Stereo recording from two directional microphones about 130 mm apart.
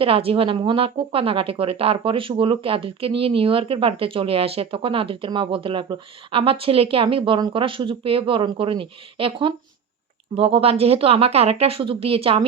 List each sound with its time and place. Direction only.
0.0 s a woman's voice: 45° right (ahead or behind)